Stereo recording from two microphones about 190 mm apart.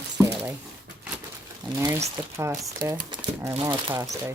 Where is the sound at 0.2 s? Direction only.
15° right (ahead or behind).